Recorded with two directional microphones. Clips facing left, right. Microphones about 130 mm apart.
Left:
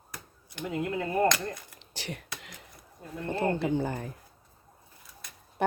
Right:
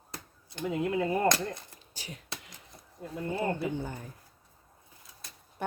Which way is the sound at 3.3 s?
90° left.